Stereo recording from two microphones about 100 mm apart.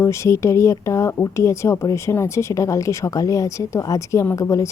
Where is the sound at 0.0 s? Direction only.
30° left (ahead or behind).